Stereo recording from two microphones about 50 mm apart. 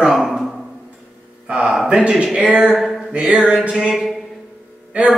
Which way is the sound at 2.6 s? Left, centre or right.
Centre.